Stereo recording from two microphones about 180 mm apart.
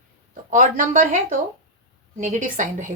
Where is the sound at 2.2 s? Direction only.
45° right (ahead or behind).